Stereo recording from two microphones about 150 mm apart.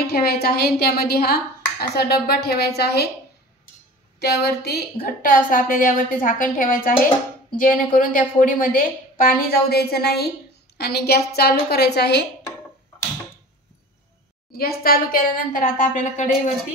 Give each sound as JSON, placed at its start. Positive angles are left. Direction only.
{"t": 0.0, "sound": "speech", "side_deg": 90}
{"t": 4.2, "sound": "speech", "side_deg": 90}
{"t": 5.0, "sound": "a woman's voice", "side_deg": 70}
{"t": 14.5, "sound": "a woman's voice", "side_deg": 90}